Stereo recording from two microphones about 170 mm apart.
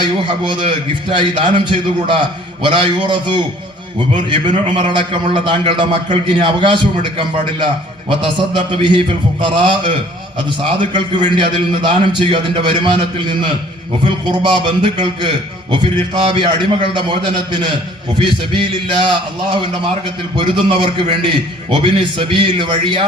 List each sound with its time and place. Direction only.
0.0 s a man's voice: 30° right (ahead or behind)